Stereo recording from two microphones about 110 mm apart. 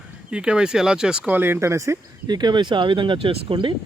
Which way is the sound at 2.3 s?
40° right (ahead or behind).